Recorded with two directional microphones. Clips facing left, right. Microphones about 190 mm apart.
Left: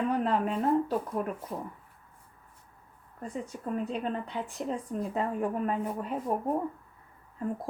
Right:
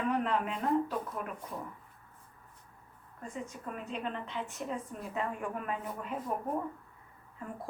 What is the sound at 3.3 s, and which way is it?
Speech, 35° left (ahead or behind).